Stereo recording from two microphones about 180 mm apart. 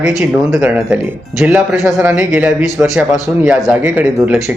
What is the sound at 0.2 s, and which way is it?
A man's voice, 5° right (ahead or behind).